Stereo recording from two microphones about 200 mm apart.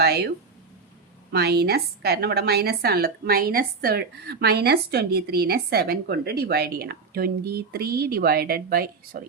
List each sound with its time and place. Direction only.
0.0 s a woman's voice: 55° right (ahead or behind)